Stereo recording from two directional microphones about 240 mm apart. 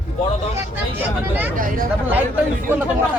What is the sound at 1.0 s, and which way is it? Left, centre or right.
Speech, centre.